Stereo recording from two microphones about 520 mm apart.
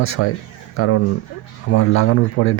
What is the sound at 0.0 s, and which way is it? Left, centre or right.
Speech, left.